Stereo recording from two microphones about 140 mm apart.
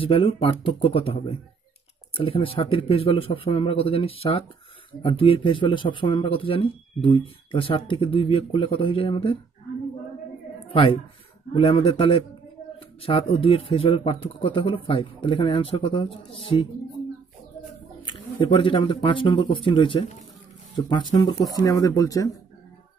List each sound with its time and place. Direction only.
0.0 s speech: 40° left (ahead or behind)
10.7 s speech: 40° left (ahead or behind)
18.0 s speech: 40° left (ahead or behind)